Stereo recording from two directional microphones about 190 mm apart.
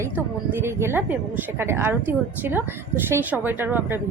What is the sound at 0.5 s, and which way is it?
Speech, 15° right (ahead or behind).